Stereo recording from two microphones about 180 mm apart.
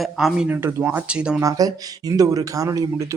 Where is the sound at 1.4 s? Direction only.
20° right (ahead or behind).